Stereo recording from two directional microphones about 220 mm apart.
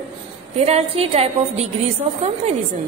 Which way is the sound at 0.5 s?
30° right (ahead or behind).